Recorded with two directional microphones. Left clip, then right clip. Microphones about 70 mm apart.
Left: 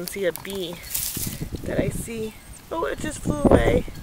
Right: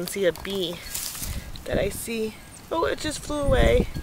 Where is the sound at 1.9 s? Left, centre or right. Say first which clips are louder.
Right 2 dB; centre.